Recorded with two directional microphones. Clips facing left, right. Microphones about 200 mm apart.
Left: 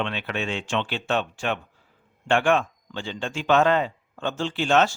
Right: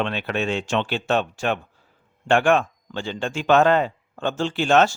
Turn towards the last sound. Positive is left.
turn(degrees=-50)  # may be behind; listen again after turning